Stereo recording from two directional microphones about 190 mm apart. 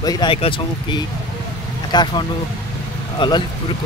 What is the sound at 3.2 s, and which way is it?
Speech, 25° left (ahead or behind).